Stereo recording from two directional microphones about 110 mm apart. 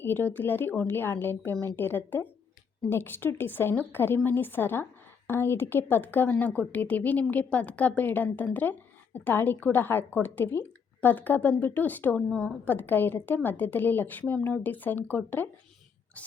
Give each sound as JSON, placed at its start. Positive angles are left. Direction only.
{"t": 0.0, "sound": "a woman's voice", "side_deg": 20}
{"t": 12.6, "sound": "a woman's voice", "side_deg": 15}